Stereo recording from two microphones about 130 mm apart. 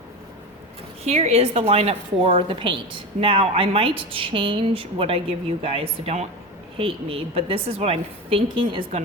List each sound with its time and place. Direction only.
1.0 s a woman's voice: 55° right (ahead or behind)